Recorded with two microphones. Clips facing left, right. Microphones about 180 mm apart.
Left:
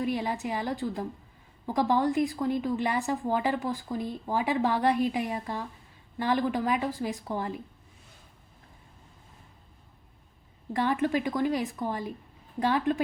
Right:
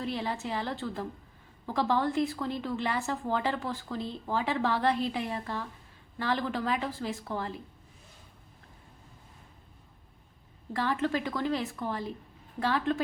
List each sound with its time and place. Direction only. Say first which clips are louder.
0.0 s a woman's voice: left 4 dB; 15° left (ahead or behind)
10.8 s a woman's voice: left 3 dB; 15° left (ahead or behind)